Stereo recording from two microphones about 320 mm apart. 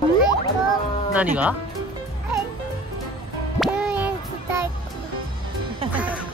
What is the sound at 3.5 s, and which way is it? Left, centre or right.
Music, centre.